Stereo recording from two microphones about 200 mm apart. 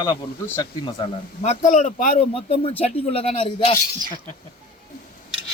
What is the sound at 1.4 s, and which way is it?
A man's voice, 35° left (ahead or behind).